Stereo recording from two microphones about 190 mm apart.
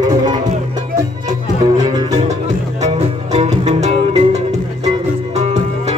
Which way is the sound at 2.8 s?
35° right (ahead or behind).